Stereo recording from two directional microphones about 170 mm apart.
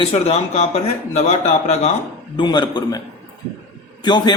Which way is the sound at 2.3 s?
25° left (ahead or behind).